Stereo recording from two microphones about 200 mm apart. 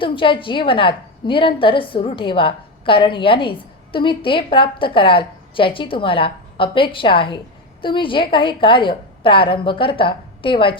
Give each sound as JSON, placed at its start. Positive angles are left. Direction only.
{"t": 0.0, "sound": "a woman's voice", "side_deg": 25}